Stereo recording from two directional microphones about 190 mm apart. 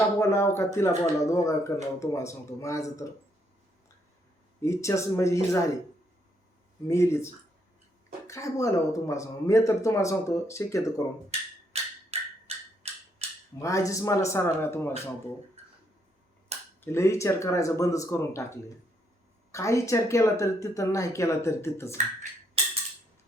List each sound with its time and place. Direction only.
0.2 s speech: 15° left (ahead or behind)
4.6 s speech: 15° left (ahead or behind)
6.8 s speech: 15° left (ahead or behind)
8.3 s speech: 15° left (ahead or behind)
11.7 s wood block: 35° right (ahead or behind)
12.5 s a sound: 30° right (ahead or behind)
13.6 s speech: 15° left (ahead or behind)
16.5 s finger snapping: 35° right (ahead or behind)
16.8 s speech: 15° left (ahead or behind)